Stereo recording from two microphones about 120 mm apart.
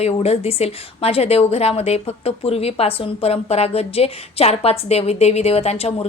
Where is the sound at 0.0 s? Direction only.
60° left (ahead or behind).